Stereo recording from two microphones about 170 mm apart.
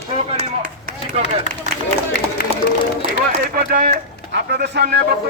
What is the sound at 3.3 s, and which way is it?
Speech, 60° right (ahead or behind).